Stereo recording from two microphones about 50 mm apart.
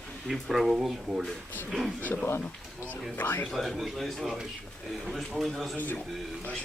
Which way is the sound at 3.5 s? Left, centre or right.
Centre.